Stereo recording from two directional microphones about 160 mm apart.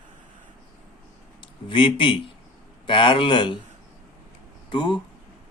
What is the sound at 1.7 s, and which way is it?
A man's voice, 30° left (ahead or behind).